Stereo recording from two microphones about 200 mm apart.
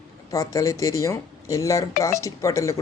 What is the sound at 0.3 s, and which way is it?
Speech, 15° left (ahead or behind).